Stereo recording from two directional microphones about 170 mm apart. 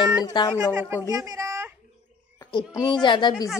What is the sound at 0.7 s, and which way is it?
Speech, 15° right (ahead or behind).